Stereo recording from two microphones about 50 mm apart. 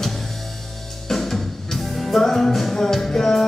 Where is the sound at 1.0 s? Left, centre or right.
Centre.